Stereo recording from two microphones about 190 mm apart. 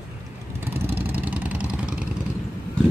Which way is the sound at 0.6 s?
10° right (ahead or behind).